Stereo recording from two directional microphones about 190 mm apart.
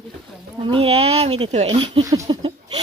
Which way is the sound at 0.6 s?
30° right (ahead or behind).